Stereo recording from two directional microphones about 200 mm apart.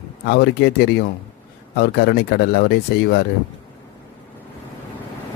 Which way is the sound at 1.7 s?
55° left (ahead or behind).